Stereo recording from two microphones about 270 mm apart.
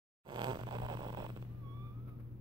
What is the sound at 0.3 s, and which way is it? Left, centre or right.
Fart, centre.